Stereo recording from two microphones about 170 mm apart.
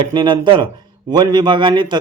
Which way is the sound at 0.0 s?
30° right (ahead or behind).